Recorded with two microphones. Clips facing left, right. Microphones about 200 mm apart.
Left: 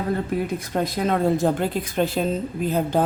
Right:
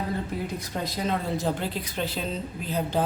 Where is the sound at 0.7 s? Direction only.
60° left (ahead or behind).